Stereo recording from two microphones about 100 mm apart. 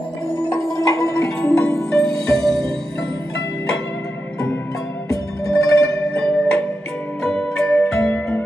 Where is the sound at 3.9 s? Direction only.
15° left (ahead or behind).